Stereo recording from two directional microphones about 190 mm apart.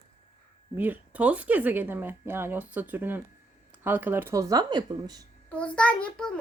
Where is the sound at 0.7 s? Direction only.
10° right (ahead or behind).